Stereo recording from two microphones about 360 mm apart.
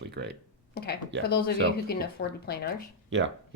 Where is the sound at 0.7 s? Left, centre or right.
Left.